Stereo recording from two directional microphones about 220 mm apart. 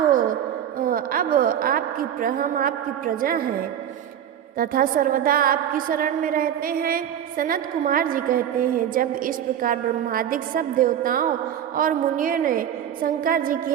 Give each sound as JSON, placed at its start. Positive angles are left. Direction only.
{"t": 0.0, "sound": "a sound", "side_deg": -40}
{"t": 0.8, "sound": "a woman's voice", "side_deg": -40}
{"t": 4.5, "sound": "a woman's voice", "side_deg": -40}